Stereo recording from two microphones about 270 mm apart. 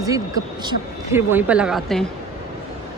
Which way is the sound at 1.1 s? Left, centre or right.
Centre.